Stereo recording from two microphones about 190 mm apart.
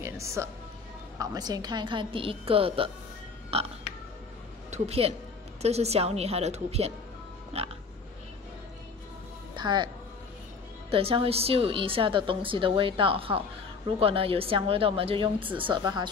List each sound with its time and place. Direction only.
0.0 s music: 15° right (ahead or behind)
1.1 s a woman's voice: 20° right (ahead or behind)
9.6 s speech: 25° right (ahead or behind)
10.9 s a woman's voice: 30° right (ahead or behind)